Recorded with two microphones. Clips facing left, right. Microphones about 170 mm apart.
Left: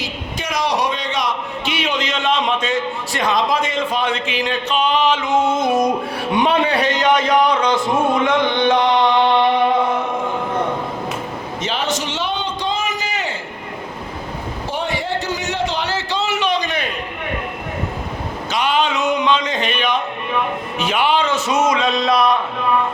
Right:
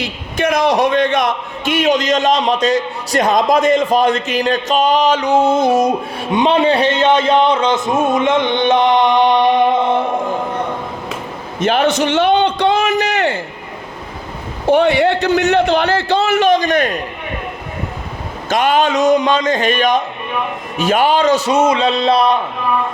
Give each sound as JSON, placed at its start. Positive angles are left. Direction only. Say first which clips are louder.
{"t": 0.0, "sound": "a man's voice", "louder": "right 8 dB", "side_deg": -55}
{"t": 6.3, "sound": "a man's voice", "louder": "right 4 dB", "side_deg": -25}
{"t": 11.6, "sound": "a sound", "louder": "right 9 dB", "side_deg": -60}
{"t": 14.7, "sound": "a man's voice", "louder": "right 12 dB", "side_deg": -65}
{"t": 18.4, "sound": "a man's voice", "louder": "right 5 dB", "side_deg": -50}